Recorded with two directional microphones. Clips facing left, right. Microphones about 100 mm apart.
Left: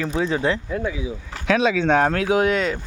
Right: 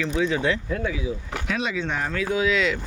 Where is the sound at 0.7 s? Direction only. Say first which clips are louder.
Left 1 dB; 15° left (ahead or behind).